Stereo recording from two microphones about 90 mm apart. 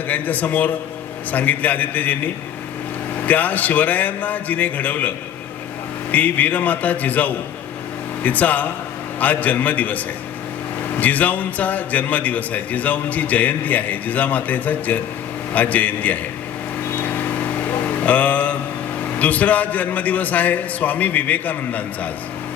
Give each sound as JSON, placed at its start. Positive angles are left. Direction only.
{"t": 0.1, "sound": "a man's voice", "side_deg": 20}
{"t": 11.0, "sound": "a man's voice", "side_deg": 15}
{"t": 18.0, "sound": "mantra", "side_deg": 15}
{"t": 19.2, "sound": "a man's voice", "side_deg": 15}